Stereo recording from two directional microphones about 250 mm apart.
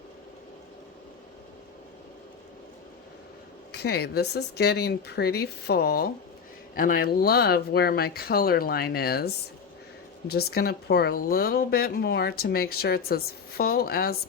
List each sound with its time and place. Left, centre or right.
3.7 s speech: left